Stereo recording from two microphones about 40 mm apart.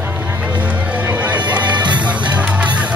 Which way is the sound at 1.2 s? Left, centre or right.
Right.